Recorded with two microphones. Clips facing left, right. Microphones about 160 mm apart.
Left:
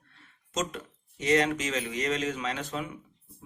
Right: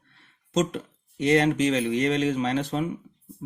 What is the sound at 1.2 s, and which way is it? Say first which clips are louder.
Speech: right 5 dB; 35° right (ahead or behind).